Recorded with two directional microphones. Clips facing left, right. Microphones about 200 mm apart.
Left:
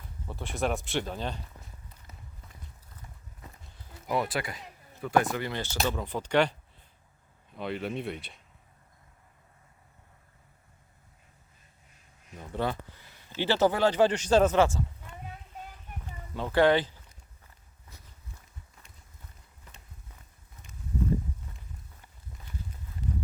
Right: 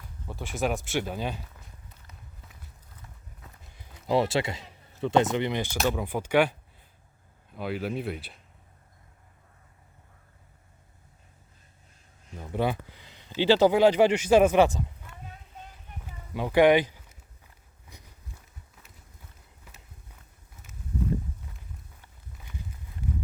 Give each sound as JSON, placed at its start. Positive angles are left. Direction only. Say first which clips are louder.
{"t": 0.3, "sound": "speech", "louder": "right 1 dB", "side_deg": -5}
{"t": 4.1, "sound": "speech", "louder": "right 5 dB", "side_deg": -25}
{"t": 12.4, "sound": "speech", "louder": "right 3 dB", "side_deg": -10}
{"t": 16.0, "sound": "a sound", "louder": "right 3 dB", "side_deg": -10}
{"t": 17.9, "sound": "walk", "louder": "right 3 dB", "side_deg": -15}
{"t": 19.7, "sound": "walk", "louder": "even", "side_deg": -10}
{"t": 23.0, "sound": "a sound", "louder": "right 1 dB", "side_deg": -10}